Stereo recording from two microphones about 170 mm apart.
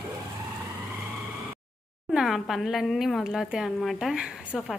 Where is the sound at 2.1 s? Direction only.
Centre (ahead or behind).